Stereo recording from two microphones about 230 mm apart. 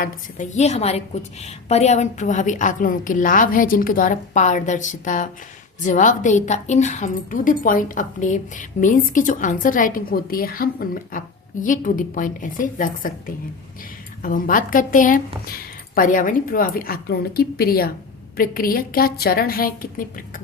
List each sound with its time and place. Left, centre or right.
0.0 s a woman's voice: left